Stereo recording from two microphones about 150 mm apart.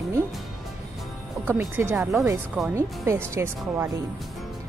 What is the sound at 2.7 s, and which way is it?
Speech, 20° right (ahead or behind).